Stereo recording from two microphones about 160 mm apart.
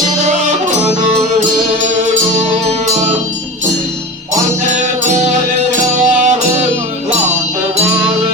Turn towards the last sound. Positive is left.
turn(degrees=-50)  # may be behind; listen again after turning